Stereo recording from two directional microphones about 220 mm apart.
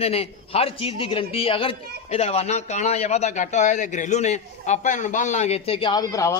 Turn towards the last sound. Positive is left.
turn(degrees=15)  # may be behind; listen again after turning